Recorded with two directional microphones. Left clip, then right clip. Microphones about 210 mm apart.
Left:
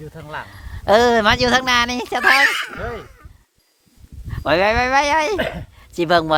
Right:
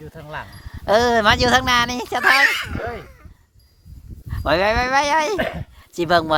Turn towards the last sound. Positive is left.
turn(degrees=10)  # may be behind; listen again after turning